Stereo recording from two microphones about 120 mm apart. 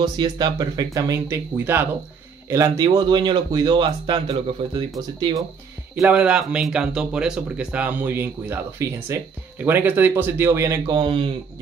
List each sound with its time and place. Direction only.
0.0 s speech: 40° right (ahead or behind)
1.3 s speech: 20° right (ahead or behind)
2.5 s speech: 35° right (ahead or behind)
6.1 s speech: 10° right (ahead or behind)
10.9 s speech: 45° right (ahead or behind)